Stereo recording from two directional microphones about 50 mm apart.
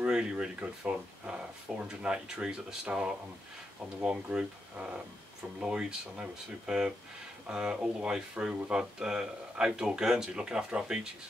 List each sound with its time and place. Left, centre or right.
0.0 s speech: centre